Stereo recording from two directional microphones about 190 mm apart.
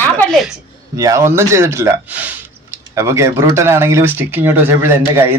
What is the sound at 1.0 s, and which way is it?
Speech, 15° right (ahead or behind).